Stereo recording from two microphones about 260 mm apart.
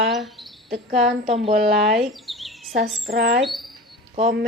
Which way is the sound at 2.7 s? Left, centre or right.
Right.